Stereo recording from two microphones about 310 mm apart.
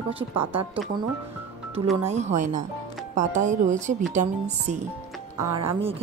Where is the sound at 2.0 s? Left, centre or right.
Right.